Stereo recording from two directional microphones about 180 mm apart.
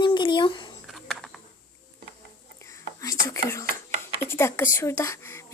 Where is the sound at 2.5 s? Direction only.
15° left (ahead or behind).